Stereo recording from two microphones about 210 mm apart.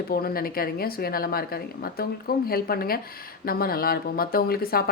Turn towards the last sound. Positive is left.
turn(degrees=45)  # may be behind; listen again after turning